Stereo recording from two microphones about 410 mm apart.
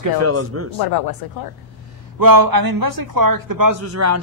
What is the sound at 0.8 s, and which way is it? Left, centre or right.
Speech, left.